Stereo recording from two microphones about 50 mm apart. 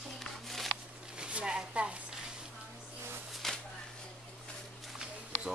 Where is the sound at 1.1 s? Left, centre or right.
Centre.